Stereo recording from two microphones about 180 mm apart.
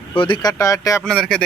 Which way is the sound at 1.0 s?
5° left (ahead or behind).